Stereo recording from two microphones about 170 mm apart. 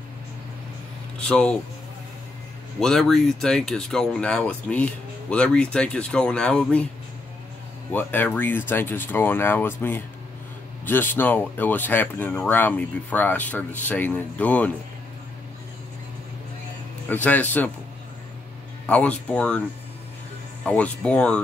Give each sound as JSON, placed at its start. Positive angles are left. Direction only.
{"t": 1.2, "sound": "speech", "side_deg": 5}
{"t": 2.8, "sound": "speech", "side_deg": 0}
{"t": 7.9, "sound": "speech", "side_deg": 10}
{"t": 17.1, "sound": "speech", "side_deg": 10}
{"t": 18.9, "sound": "speech", "side_deg": 5}
{"t": 20.6, "sound": "speech", "side_deg": 10}